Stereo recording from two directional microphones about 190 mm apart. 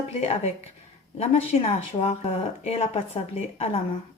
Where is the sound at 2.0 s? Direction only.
30° left (ahead or behind).